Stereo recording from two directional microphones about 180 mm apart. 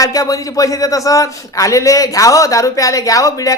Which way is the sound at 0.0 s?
20° left (ahead or behind).